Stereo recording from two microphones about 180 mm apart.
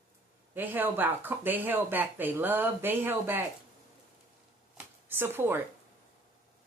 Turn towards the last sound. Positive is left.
turn(degrees=-10)  # may be behind; listen again after turning